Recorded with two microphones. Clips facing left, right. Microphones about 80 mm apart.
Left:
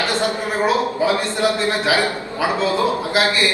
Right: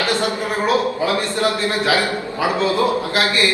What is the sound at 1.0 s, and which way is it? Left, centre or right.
A man's voice, left.